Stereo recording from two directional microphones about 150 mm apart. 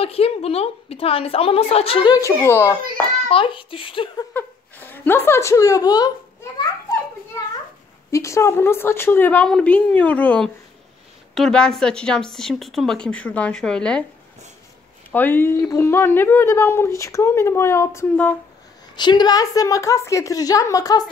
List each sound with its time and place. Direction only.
0.0 s a woman's voice: 40° left (ahead or behind); by 2.8 s 15° left (ahead or behind)
3.3 s a woman's voice: 35° left (ahead or behind)
4.3 s speech: 10° left (ahead or behind)
8.1 s speech: 20° left (ahead or behind)
15.0 s speech: 10° left (ahead or behind)
18.9 s a woman's voice: 30° left (ahead or behind)